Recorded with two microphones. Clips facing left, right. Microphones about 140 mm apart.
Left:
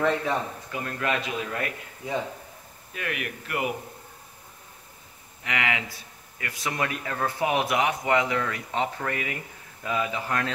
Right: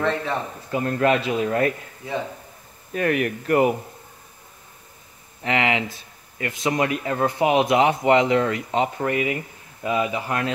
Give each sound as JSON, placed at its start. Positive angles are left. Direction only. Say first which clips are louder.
{"t": 0.0, "sound": "speech", "louder": "right 1 dB", "side_deg": 10}
{"t": 0.7, "sound": "speech", "louder": "right 12 dB", "side_deg": -35}
{"t": 2.9, "sound": "speech", "louder": "right 11 dB", "side_deg": -40}
{"t": 5.4, "sound": "speech", "louder": "right 7 dB", "side_deg": -25}